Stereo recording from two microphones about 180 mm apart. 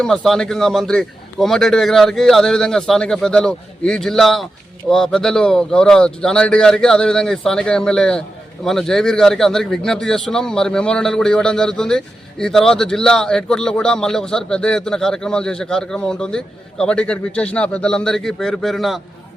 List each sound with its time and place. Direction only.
0.0 s a man's voice: 5° left (ahead or behind)